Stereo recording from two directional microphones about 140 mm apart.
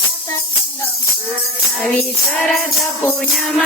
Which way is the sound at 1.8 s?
5° left (ahead or behind).